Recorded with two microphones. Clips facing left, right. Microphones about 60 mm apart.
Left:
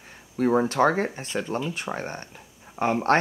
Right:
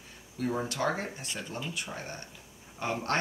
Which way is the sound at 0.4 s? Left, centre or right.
Left.